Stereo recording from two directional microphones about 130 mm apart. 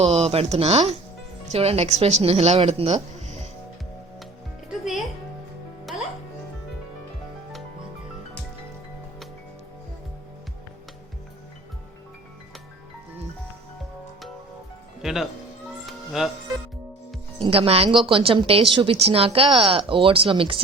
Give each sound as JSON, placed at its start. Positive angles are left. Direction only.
{"t": 0.0, "sound": "speech", "side_deg": -50}
{"t": 5.9, "sound": "music", "side_deg": 0}
{"t": 15.0, "sound": "speech", "side_deg": 0}
{"t": 15.9, "sound": "music", "side_deg": 0}
{"t": 17.3, "sound": "speech", "side_deg": -45}